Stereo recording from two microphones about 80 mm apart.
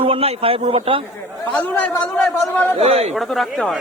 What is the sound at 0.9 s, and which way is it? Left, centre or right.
Speech, right.